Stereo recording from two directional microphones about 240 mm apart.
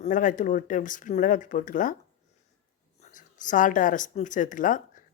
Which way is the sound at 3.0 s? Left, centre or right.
Left.